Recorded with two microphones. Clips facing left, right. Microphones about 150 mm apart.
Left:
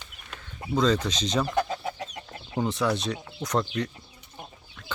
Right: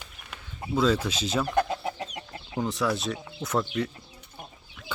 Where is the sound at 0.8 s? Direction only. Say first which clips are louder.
Even; 5° right (ahead or behind).